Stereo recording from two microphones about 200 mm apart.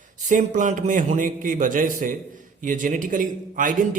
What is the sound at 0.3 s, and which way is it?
A man's voice, 40° right (ahead or behind).